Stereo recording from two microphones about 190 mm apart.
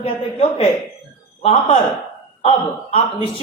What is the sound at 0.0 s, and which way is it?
A man's voice, 30° left (ahead or behind).